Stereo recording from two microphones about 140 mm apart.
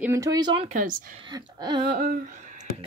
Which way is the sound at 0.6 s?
65° right (ahead or behind).